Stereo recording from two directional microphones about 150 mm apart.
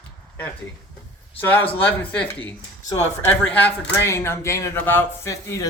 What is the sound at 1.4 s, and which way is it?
Speech, 15° left (ahead or behind).